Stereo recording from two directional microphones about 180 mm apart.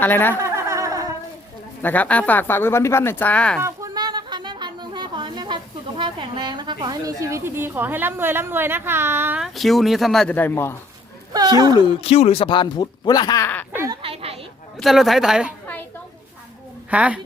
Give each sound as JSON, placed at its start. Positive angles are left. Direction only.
{"t": 0.0, "sound": "speech", "side_deg": 10}
{"t": 0.3, "sound": "a sound", "side_deg": -15}
{"t": 1.8, "sound": "speech", "side_deg": 10}
{"t": 3.6, "sound": "a sound", "side_deg": -15}
{"t": 6.0, "sound": "a woman's voice", "side_deg": -25}
{"t": 11.3, "sound": "speech", "side_deg": -20}
{"t": 11.9, "sound": "speech", "side_deg": 35}
{"t": 13.7, "sound": "quack", "side_deg": -20}
{"t": 14.0, "sound": "a sound", "side_deg": -35}
{"t": 14.8, "sound": "a woman's voice", "side_deg": 0}
{"t": 15.6, "sound": "a sound", "side_deg": 10}
{"t": 16.9, "sound": "a woman's voice", "side_deg": -10}